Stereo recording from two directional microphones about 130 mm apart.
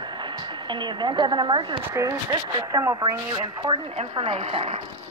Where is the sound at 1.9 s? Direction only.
25° right (ahead or behind).